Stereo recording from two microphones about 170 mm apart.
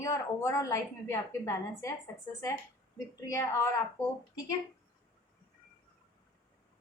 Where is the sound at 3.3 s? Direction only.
15° left (ahead or behind).